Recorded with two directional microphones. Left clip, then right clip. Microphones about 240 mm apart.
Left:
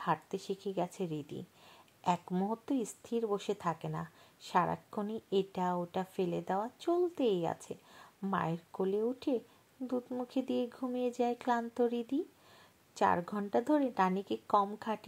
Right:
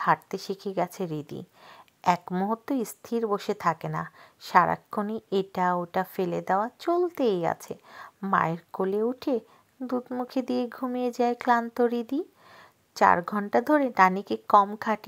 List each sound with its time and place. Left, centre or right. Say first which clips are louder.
0.0 s a woman's voice: right 10 dB; right